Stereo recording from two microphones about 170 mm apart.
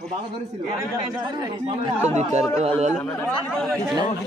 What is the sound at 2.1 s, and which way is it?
Speech, 40° right (ahead or behind).